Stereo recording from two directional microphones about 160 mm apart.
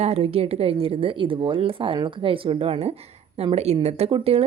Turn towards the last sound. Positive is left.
turn(degrees=-40)  # may be behind; listen again after turning